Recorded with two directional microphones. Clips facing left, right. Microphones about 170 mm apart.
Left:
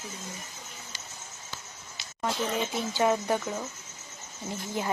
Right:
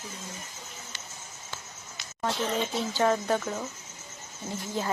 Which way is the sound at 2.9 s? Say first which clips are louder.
Even; 10° left (ahead or behind).